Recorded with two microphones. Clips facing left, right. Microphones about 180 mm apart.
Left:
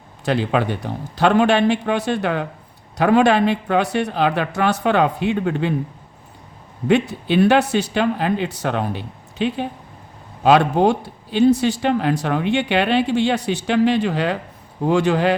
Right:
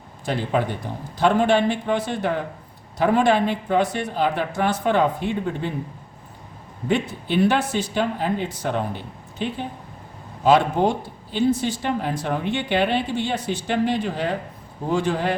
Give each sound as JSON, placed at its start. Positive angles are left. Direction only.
{"t": 0.3, "sound": "speech", "side_deg": 80}
{"t": 6.8, "sound": "speech", "side_deg": 80}
{"t": 10.4, "sound": "speech", "side_deg": 75}